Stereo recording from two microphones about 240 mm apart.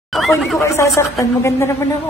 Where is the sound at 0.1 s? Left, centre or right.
Centre.